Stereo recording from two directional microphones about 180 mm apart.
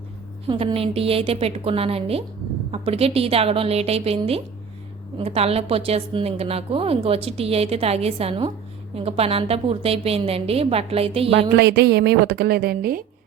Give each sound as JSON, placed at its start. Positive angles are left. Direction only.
{"t": 0.4, "sound": "a woman's voice", "side_deg": -30}
{"t": 11.5, "sound": "a woman's voice", "side_deg": -70}